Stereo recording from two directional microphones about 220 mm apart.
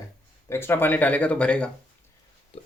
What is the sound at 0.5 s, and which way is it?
Speech, 10° left (ahead or behind).